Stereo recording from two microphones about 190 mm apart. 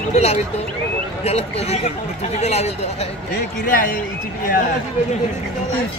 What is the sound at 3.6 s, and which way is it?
Speech, 45° left (ahead or behind).